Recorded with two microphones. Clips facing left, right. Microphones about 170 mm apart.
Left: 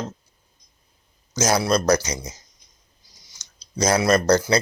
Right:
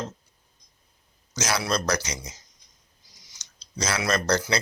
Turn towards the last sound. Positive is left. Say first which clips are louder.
# left 7 dB
turn(degrees=45)  # may be behind; listen again after turning